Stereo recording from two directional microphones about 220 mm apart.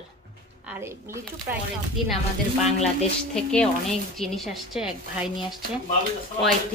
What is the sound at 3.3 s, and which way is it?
A woman's voice, 5° left (ahead or behind).